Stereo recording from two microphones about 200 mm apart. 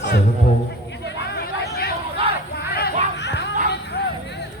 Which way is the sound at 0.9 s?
60° left (ahead or behind).